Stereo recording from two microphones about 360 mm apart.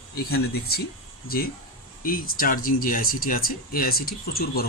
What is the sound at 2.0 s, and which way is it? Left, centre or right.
Speech, left.